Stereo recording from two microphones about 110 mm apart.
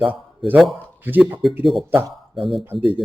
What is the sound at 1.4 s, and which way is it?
Speech, centre (ahead or behind).